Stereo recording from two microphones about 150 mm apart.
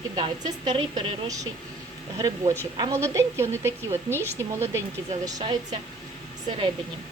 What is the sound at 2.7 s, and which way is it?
A woman's voice, 25° right (ahead or behind).